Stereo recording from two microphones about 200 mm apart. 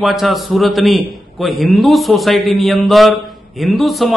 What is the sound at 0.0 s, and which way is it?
A man's voice, centre (ahead or behind).